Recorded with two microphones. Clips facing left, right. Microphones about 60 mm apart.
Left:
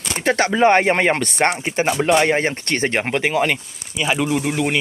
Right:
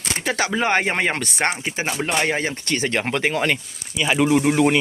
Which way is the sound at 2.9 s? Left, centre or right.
Left.